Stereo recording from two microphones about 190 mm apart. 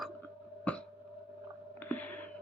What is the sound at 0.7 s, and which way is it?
Hiccup, 5° left (ahead or behind).